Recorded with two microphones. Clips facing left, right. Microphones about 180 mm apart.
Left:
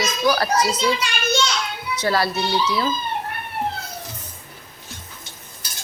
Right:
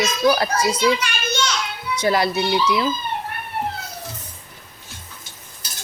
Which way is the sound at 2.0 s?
15° right (ahead or behind).